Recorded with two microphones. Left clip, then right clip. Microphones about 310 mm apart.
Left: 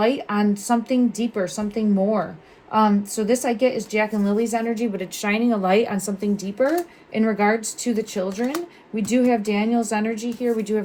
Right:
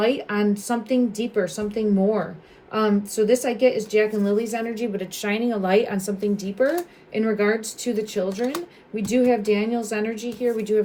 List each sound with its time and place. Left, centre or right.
0.0 s a woman's voice: centre